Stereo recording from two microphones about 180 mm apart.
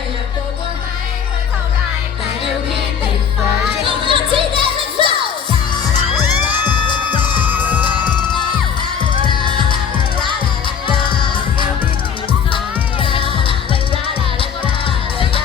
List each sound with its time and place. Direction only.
3.8 s music: 30° right (ahead or behind)
10.8 s music: 30° left (ahead or behind)
13.0 s music: 30° left (ahead or behind)